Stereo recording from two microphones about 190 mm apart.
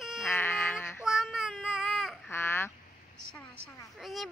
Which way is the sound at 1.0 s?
Centre (ahead or behind).